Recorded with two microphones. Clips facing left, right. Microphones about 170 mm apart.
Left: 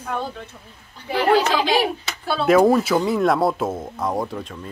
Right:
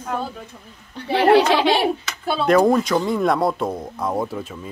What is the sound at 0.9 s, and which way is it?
Speech, 65° right (ahead or behind).